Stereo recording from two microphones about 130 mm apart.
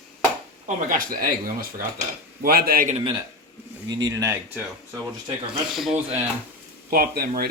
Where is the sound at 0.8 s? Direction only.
90° right.